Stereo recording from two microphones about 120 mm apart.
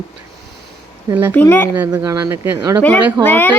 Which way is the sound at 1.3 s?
15° left (ahead or behind).